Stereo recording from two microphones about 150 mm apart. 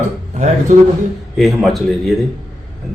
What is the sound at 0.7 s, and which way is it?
Speech, 55° right (ahead or behind).